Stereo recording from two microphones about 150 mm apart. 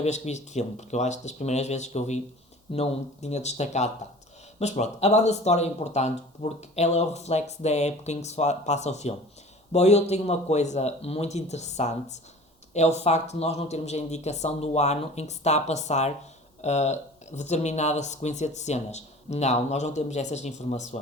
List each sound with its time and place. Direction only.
0.0 s speech: 50° left (ahead or behind)